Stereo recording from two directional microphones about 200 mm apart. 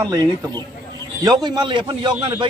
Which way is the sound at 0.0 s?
20° right (ahead or behind).